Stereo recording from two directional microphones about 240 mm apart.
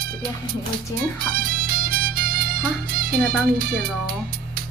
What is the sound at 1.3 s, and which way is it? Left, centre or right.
Music, right.